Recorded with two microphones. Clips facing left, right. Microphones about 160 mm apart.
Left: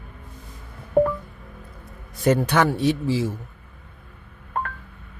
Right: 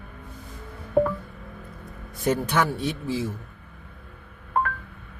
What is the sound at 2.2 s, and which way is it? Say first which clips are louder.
Speech: left 4 dB; 75° left (ahead or behind).